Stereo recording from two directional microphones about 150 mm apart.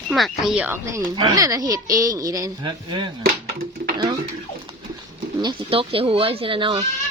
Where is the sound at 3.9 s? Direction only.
30° right (ahead or behind).